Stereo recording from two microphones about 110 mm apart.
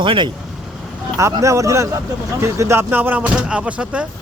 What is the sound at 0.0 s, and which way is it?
Speech, 50° right (ahead or behind).